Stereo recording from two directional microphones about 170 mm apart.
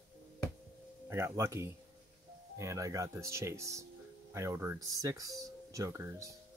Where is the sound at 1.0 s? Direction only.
15° right (ahead or behind).